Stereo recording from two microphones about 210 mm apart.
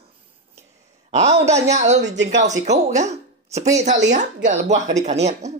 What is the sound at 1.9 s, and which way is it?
Speech, 55° right (ahead or behind).